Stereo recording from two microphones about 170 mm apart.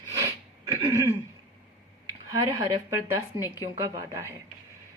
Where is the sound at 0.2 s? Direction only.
20° right (ahead or behind).